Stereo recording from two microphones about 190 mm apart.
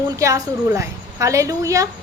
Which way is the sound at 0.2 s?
15° right (ahead or behind).